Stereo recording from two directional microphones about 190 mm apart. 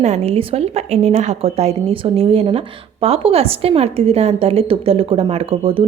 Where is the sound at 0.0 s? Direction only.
35° right (ahead or behind).